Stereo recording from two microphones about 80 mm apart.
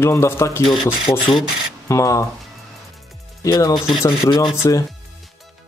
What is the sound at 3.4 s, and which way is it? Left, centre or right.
Speech, left.